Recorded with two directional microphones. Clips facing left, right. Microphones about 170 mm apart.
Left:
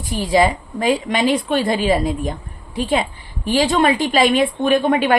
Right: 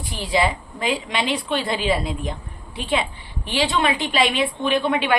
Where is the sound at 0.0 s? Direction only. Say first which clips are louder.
Left 6 dB; 45° left (ahead or behind).